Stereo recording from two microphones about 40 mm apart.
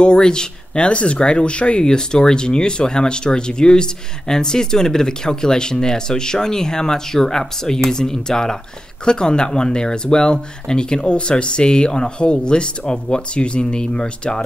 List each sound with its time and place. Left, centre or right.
0.0 s speech: left
1.9 s speech: centre